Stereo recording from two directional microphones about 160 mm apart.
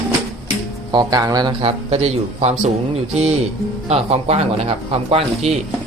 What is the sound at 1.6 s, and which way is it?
Speech, 40° right (ahead or behind).